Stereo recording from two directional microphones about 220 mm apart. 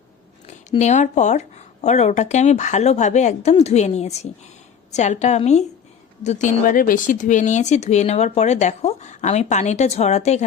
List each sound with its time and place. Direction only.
0.4 s speech: 30° left (ahead or behind)